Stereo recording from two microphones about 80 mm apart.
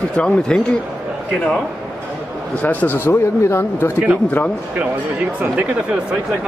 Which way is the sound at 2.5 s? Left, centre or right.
Left.